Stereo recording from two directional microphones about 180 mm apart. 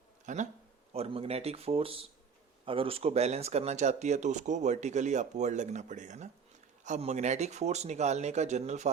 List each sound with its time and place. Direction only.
0.3 s speech: 45° right (ahead or behind)
0.9 s speech: 35° right (ahead or behind)